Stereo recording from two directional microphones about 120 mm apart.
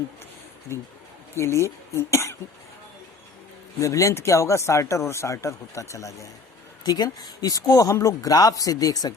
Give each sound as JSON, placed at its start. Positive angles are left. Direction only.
{"t": 1.4, "sound": "speech", "side_deg": 25}
{"t": 3.8, "sound": "speech", "side_deg": 25}